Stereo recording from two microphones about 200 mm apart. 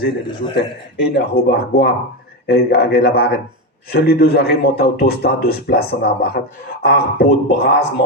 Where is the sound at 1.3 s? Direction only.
50° left (ahead or behind).